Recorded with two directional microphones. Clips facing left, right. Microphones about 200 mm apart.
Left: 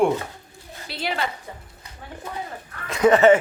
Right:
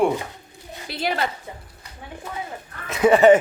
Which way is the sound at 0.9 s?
45° right (ahead or behind).